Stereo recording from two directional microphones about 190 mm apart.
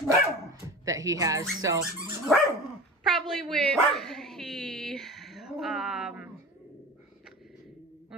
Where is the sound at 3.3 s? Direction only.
Centre (ahead or behind).